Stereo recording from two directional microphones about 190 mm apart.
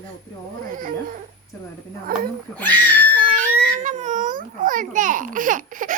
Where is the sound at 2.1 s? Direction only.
50° right (ahead or behind).